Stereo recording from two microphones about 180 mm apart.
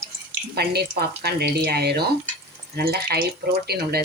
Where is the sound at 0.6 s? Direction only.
60° right (ahead or behind).